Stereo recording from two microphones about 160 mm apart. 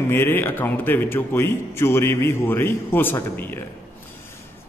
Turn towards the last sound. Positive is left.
turn(degrees=10)  # may be behind; listen again after turning